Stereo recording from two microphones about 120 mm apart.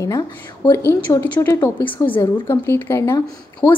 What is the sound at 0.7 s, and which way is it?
A woman's voice, 20° left (ahead or behind).